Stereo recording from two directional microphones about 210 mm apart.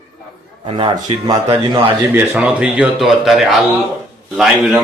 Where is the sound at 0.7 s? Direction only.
25° right (ahead or behind).